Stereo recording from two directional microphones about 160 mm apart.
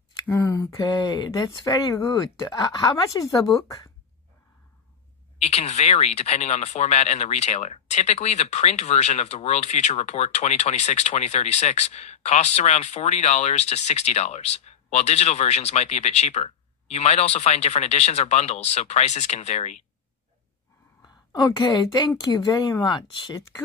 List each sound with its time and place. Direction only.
0.3 s a woman's voice: 15° left (ahead or behind)
5.4 s speech: 40° left (ahead or behind)
21.0 s a woman's voice: 25° left (ahead or behind)